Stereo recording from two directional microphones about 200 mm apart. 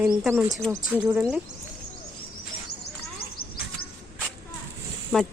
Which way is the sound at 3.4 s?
10° left (ahead or behind).